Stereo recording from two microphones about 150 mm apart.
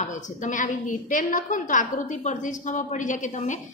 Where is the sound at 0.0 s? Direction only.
55° left (ahead or behind).